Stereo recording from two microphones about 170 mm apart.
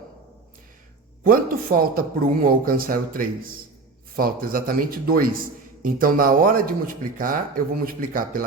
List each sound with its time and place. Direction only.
1.2 s a man's voice: 55° right (ahead or behind)